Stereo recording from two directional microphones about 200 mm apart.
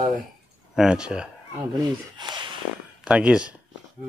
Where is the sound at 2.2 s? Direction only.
20° right (ahead or behind).